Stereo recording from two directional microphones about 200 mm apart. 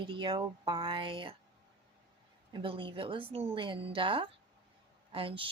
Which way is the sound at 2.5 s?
25° right (ahead or behind).